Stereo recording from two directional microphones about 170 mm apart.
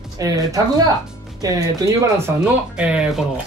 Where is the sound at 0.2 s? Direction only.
20° right (ahead or behind).